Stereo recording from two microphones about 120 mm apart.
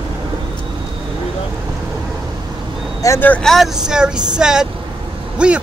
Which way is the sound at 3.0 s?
25° left (ahead or behind).